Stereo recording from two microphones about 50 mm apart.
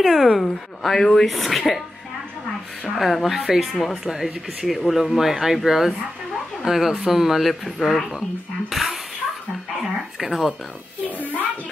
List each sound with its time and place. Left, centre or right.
0.0 s speech: centre
3.0 s speech: centre
4.0 s speech: centre
10.1 s speech: centre
11.1 s a child's voice: left